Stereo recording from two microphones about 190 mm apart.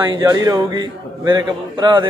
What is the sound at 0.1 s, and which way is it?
Speech, 20° right (ahead or behind).